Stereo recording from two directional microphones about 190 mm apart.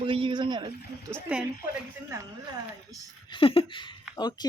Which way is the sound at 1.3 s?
5° right (ahead or behind).